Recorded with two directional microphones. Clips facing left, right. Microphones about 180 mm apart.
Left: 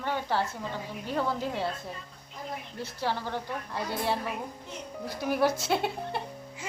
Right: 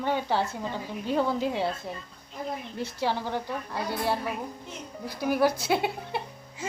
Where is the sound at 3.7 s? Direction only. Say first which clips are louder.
Right 1 dB; 5° right (ahead or behind).